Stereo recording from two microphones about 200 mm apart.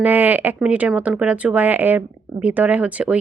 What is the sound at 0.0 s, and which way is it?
Speech, 10° right (ahead or behind).